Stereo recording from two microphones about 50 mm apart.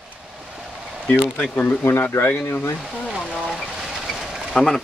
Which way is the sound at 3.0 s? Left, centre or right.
Centre.